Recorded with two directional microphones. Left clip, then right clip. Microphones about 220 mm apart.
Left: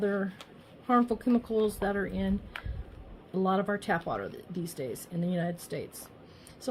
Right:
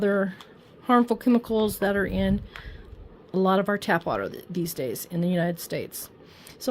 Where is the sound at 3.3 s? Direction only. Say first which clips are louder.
Right 6 dB; 40° right (ahead or behind).